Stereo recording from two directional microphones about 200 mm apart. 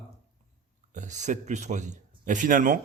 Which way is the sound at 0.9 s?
35° right (ahead or behind).